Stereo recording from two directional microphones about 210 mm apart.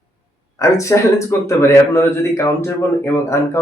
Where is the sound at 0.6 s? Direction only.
15° left (ahead or behind).